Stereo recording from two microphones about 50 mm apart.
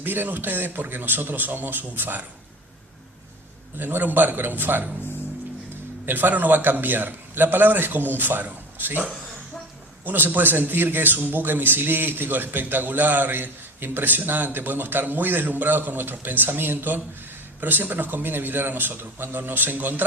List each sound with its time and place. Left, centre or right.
0.0 s a man's voice: right
3.8 s a man's voice: right
6.1 s a man's voice: right
10.0 s a man's voice: right